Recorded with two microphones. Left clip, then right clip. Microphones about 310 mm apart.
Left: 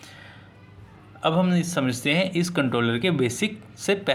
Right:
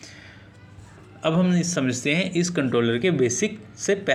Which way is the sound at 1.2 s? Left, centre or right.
Centre.